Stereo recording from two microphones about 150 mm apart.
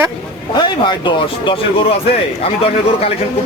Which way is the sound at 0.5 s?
30° left (ahead or behind).